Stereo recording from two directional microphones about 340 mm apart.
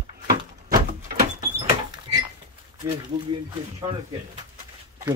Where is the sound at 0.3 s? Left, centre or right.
Right.